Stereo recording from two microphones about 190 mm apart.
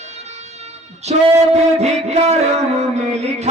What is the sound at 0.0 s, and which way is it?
Music, 35° right (ahead or behind).